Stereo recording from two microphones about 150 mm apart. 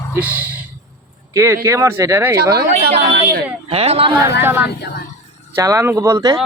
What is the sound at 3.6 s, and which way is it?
Speech, 40° right (ahead or behind).